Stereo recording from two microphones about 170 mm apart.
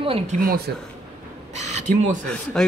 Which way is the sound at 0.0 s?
35° right (ahead or behind).